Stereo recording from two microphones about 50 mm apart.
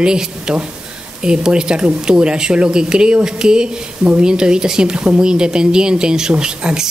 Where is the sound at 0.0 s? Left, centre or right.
Centre.